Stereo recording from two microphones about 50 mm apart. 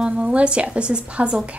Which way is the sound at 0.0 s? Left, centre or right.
Right.